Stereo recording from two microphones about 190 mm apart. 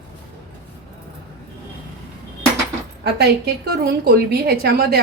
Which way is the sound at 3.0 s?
60° right (ahead or behind).